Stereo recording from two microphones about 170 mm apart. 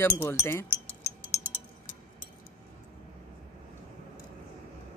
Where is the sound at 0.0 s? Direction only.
15° left (ahead or behind).